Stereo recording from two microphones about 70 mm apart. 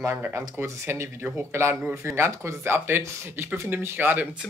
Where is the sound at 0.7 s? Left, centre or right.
Right.